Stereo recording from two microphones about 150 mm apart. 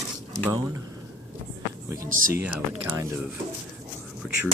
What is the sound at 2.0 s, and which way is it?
Speech, 70° right (ahead or behind).